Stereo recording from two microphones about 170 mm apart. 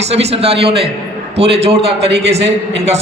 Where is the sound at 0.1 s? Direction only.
40° right (ahead or behind).